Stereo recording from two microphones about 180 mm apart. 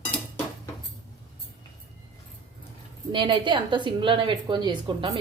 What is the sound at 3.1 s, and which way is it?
Speech, 25° right (ahead or behind).